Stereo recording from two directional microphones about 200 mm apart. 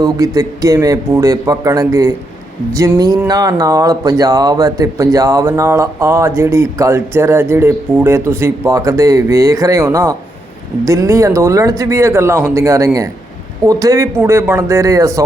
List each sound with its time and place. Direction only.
0.0 s speech: 15° right (ahead or behind)